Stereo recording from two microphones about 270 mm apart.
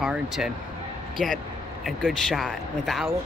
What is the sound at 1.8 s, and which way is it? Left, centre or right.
Speech, centre.